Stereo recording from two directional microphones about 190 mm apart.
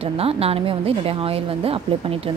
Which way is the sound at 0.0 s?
30° right (ahead or behind).